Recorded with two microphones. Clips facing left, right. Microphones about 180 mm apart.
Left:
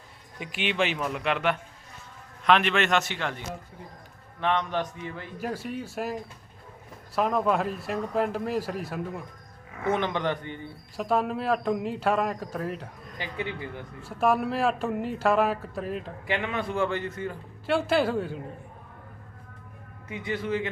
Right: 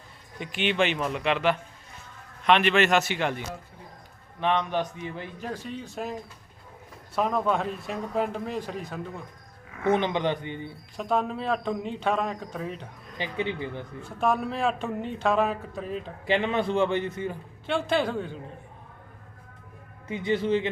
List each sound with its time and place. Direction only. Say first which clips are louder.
0.3 s a man's voice: right 2 dB; 5° left (ahead or behind); by 5.3 s 20° right (ahead or behind)
5.4 s speech: left 5 dB; 10° left (ahead or behind)
7.2 s a man's voice: left 1 dB; centre (ahead or behind)
9.8 s a man's voice: right 2 dB; 20° right (ahead or behind)
10.9 s a man's voice: left 1 dB; 5° left (ahead or behind)
13.1 s a man's voice: right 4 dB; 20° right (ahead or behind)
14.0 s a man's voice: left 2 dB; 5° left (ahead or behind)
16.2 s a man's voice: right 6 dB; 30° right (ahead or behind)
17.7 s a man's voice: left 2 dB; 5° left (ahead or behind)
20.1 s a man's voice: right 5 dB; 25° right (ahead or behind)